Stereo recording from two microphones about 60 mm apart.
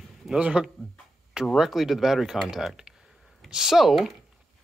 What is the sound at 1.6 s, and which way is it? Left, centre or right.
Speech, centre.